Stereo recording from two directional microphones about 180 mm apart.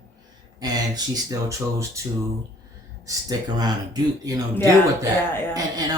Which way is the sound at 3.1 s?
20° right (ahead or behind).